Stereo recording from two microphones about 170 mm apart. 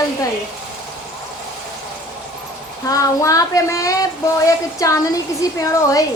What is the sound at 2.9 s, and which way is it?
A woman's voice, 20° left (ahead or behind).